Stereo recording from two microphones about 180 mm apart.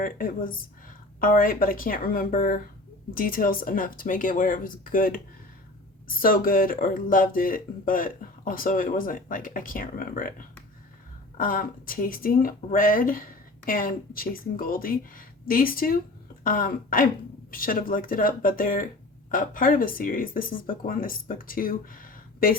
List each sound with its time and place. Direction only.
0.0 s speech: 50° left (ahead or behind)